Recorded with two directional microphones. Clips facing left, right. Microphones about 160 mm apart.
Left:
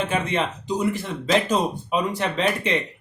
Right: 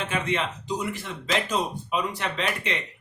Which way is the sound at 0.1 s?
35° left (ahead or behind).